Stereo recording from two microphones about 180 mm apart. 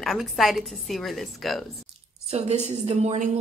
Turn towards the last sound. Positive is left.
turn(degrees=-40)  # may be behind; listen again after turning